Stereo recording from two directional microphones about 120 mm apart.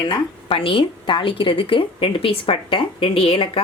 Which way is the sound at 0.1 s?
45° left (ahead or behind).